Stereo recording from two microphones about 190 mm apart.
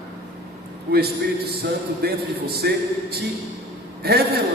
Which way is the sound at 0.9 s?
55° right (ahead or behind).